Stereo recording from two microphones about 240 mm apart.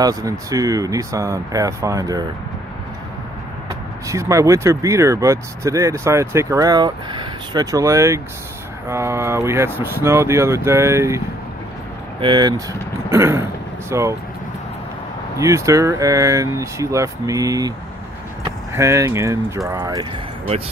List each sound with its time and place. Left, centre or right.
0.0 s speech: centre
4.1 s speech: centre
15.3 s speech: centre